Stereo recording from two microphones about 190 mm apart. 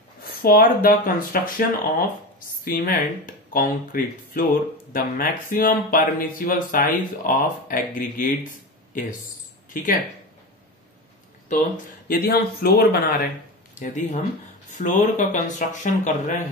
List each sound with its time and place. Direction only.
0.2 s speech: 50° left (ahead or behind)
2.6 s speech: 50° left (ahead or behind)
11.4 s speech: 40° left (ahead or behind)
13.7 s speech: 40° left (ahead or behind)